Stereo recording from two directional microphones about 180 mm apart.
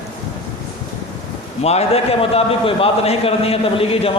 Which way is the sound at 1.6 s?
35° left (ahead or behind).